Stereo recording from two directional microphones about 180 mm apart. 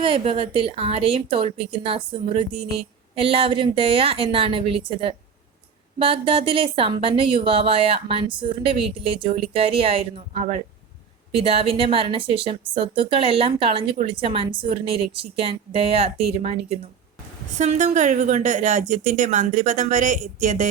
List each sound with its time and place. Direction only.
0.0 s a woman's voice: 30° right (ahead or behind)